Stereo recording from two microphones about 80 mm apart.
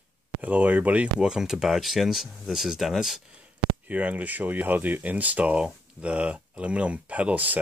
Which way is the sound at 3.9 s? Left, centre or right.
Centre.